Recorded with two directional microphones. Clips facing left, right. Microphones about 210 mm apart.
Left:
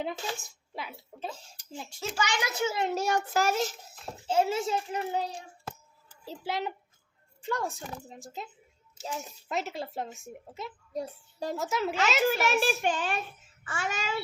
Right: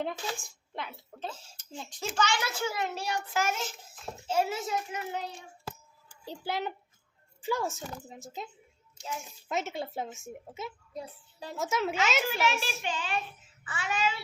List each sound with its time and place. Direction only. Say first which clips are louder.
0.4 s a woman's voice: even; 5° left (ahead or behind)
2.1 s a child's voice: even; 15° left (ahead or behind)
2.9 s a child's voice: left 5 dB; 45° left (ahead or behind)
4.3 s a child's voice: left 3 dB; 25° left (ahead or behind)
6.2 s a woman's voice: left 1 dB; centre (ahead or behind)
10.9 s a child's voice: left 6 dB; 45° left (ahead or behind)
11.5 s a woman's voice: right 1 dB; centre (ahead or behind)
12.5 s a child's voice: left 5 dB; 50° left (ahead or behind)